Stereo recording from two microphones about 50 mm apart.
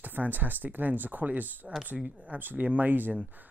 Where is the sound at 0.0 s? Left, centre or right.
Right.